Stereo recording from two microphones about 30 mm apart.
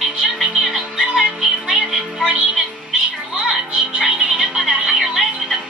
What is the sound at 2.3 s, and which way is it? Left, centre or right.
Music, centre.